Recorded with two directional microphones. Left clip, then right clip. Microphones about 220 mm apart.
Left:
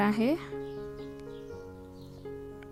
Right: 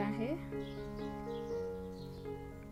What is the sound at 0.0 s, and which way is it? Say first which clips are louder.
Speech: left 10 dB; 45° left (ahead or behind).